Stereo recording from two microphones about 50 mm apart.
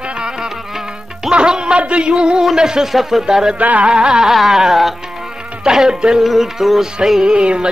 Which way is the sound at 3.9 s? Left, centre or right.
Centre.